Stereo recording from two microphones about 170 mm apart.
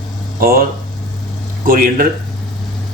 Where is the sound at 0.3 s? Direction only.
60° right (ahead or behind).